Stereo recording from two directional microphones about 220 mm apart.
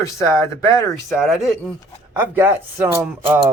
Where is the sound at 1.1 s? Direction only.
Centre (ahead or behind).